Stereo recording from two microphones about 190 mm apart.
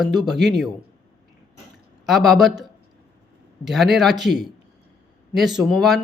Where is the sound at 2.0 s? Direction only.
Centre (ahead or behind).